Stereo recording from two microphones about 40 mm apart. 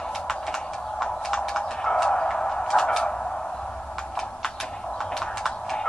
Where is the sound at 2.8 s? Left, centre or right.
Left.